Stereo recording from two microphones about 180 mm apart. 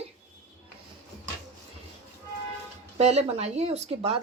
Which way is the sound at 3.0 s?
35° right (ahead or behind).